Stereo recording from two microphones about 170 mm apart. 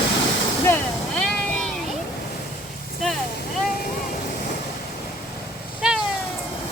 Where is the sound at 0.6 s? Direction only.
10° left (ahead or behind).